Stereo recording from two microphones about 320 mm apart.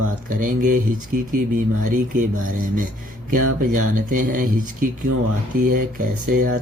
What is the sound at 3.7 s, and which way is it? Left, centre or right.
Speech, right.